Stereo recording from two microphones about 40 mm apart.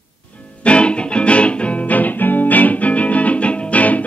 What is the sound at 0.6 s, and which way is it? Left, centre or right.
Music, left.